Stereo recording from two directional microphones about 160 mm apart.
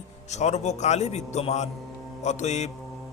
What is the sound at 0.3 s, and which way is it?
A man's voice, 45° left (ahead or behind).